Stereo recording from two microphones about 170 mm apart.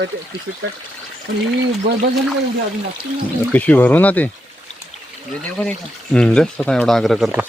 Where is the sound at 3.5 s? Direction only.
10° left (ahead or behind).